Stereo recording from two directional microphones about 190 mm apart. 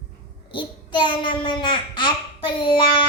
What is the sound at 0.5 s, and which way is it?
A child's voice, 25° left (ahead or behind).